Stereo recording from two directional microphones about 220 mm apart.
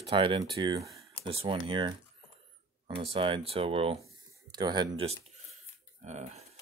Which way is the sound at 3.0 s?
25° right (ahead or behind).